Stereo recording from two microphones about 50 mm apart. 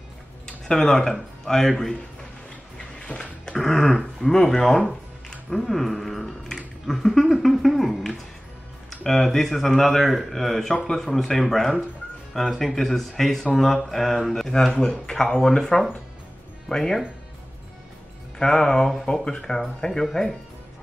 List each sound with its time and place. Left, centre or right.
0.5 s speech: centre
3.1 s a sound: left
3.5 s speech: centre
18.4 s speech: centre